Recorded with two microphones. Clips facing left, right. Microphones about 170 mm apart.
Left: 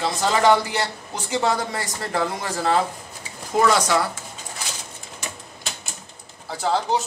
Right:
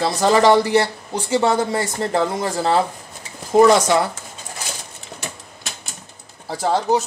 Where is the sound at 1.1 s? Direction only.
30° right (ahead or behind).